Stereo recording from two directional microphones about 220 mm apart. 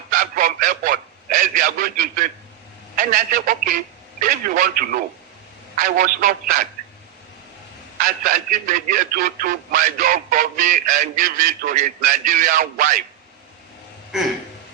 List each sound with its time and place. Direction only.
0.1 s a sound: 40° right (ahead or behind)
2.9 s speech: 40° right (ahead or behind)
8.0 s speech: 40° right (ahead or behind)